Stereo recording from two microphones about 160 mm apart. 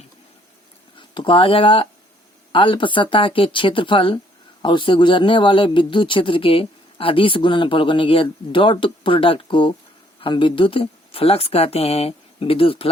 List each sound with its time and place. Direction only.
0.9 s speech: 30° left (ahead or behind)